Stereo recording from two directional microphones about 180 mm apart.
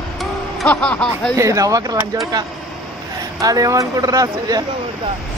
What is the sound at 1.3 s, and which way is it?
Speech, 15° right (ahead or behind).